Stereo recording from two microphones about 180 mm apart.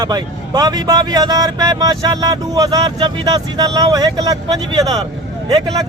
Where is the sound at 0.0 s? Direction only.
25° right (ahead or behind).